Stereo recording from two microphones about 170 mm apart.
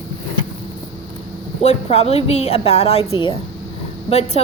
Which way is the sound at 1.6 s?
40° left (ahead or behind).